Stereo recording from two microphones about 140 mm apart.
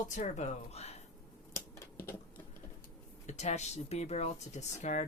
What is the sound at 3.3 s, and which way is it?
Speech, 55° left (ahead or behind).